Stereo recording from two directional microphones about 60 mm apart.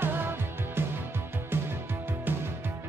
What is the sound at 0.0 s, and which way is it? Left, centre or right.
Music, right.